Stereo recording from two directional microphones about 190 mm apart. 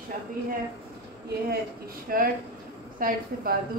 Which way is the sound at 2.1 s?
50° right (ahead or behind).